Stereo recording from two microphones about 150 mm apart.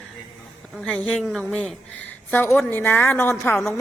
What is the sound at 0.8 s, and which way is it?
A woman's voice, centre (ahead or behind).